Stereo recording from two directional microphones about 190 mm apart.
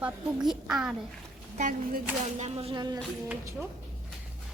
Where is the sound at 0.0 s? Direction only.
5° right (ahead or behind).